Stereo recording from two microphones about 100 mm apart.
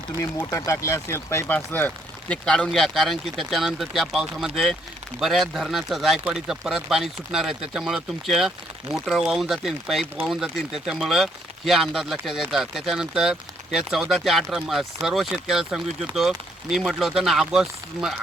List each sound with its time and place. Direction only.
0.2 s speech: 35° left (ahead or behind); by 18.1 s 5° right (ahead or behind)